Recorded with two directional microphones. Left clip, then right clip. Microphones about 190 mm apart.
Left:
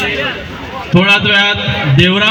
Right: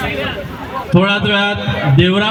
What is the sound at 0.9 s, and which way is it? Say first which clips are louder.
A man's voice: left 5 dB; 15° left (ahead or behind).